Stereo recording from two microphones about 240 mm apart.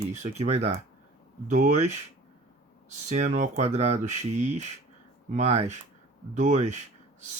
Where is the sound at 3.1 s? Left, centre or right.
Right.